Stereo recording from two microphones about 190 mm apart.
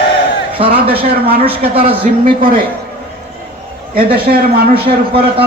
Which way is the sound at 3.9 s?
55° right (ahead or behind).